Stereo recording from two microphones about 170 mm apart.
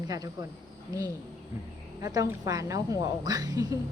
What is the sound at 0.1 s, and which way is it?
Speech, 20° right (ahead or behind).